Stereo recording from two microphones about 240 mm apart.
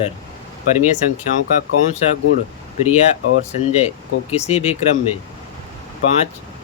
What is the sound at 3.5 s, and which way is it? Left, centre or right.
Speech, left.